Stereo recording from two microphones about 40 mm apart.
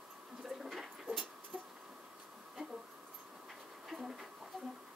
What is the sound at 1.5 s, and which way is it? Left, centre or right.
Insect, right.